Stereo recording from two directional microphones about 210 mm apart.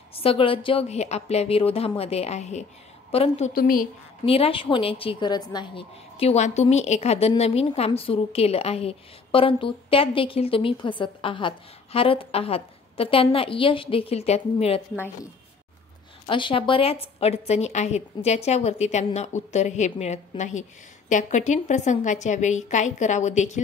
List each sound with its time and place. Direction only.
0.1 s a woman's voice: 25° left (ahead or behind)
3.5 s a woman's voice: 45° left (ahead or behind)
4.3 s a woman's voice: 25° left (ahead or behind)
16.3 s a woman's voice: 25° left (ahead or behind)